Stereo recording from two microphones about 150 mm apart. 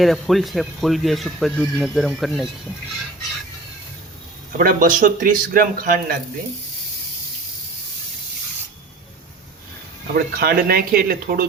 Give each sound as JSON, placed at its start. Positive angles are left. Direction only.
{"t": 0.0, "sound": "speech", "side_deg": 0}
{"t": 4.5, "sound": "speech", "side_deg": -65}
{"t": 10.2, "sound": "speech", "side_deg": -85}